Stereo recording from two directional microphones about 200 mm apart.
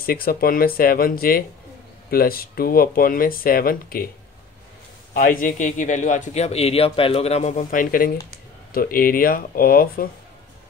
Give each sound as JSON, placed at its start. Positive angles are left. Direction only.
{"t": 0.0, "sound": "speech", "side_deg": 50}
{"t": 5.1, "sound": "a man's voice", "side_deg": 45}